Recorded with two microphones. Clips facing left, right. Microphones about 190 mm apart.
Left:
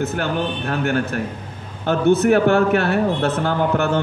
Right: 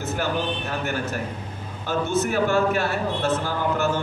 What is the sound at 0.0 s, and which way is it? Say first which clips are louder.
A man's voice: left 4 dB; 65° left (ahead or behind).